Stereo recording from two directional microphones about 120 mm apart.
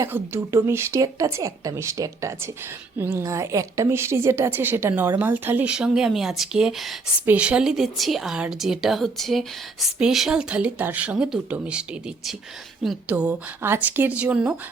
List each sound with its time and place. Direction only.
0.0 s a woman's voice: 25° right (ahead or behind); by 14.5 s 10° right (ahead or behind)